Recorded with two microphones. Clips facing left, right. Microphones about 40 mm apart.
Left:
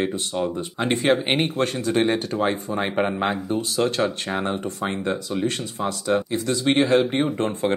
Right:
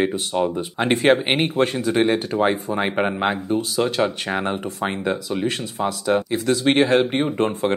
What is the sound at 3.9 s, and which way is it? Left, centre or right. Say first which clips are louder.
Speech: right 2 dB; centre.